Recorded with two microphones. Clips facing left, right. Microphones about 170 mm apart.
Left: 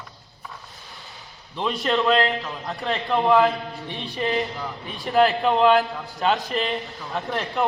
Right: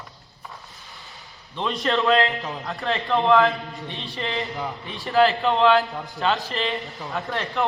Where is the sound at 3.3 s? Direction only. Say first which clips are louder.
Even; 20° left (ahead or behind).